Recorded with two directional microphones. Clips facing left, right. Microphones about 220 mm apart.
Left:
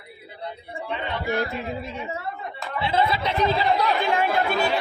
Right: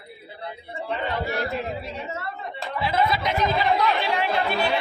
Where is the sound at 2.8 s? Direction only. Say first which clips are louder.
Left 1 dB; 30° left (ahead or behind).